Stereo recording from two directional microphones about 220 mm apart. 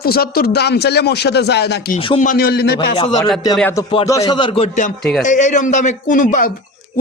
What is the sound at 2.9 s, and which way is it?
Speech, 25° left (ahead or behind).